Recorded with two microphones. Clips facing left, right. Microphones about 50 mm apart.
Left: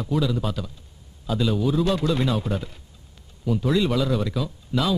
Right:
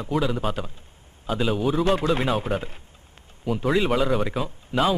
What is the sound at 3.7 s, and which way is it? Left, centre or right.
A man's voice, right.